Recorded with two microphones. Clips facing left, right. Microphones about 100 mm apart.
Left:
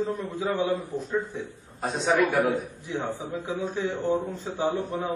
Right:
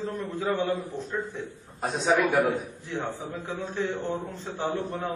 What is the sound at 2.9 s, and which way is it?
Speech, 15° left (ahead or behind).